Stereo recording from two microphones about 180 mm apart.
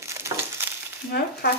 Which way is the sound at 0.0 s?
15° right (ahead or behind).